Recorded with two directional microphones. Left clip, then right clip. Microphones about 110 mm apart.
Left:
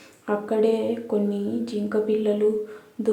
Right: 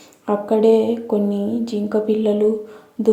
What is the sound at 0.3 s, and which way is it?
Speech, 35° right (ahead or behind).